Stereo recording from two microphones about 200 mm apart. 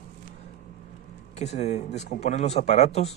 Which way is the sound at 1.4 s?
35° left (ahead or behind).